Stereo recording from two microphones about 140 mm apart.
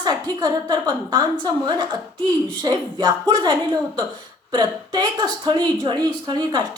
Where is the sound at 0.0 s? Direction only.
30° right (ahead or behind).